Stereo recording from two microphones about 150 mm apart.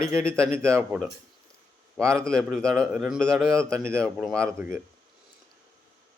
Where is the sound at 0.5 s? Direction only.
15° right (ahead or behind).